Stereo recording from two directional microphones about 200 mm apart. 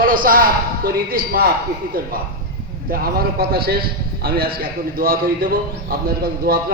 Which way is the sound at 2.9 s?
50° right (ahead or behind).